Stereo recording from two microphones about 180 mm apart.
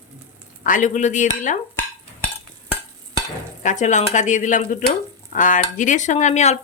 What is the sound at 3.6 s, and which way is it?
Speech, 40° left (ahead or behind).